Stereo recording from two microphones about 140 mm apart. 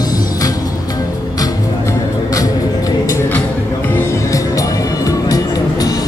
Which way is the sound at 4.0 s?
25° left (ahead or behind).